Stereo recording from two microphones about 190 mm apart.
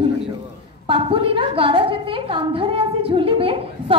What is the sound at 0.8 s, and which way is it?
A woman's voice, 25° right (ahead or behind).